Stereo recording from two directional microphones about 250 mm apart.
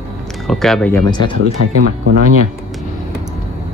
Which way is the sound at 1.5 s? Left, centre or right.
Right.